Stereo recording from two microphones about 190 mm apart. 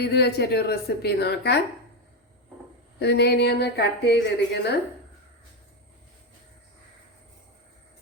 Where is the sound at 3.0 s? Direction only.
60° left (ahead or behind).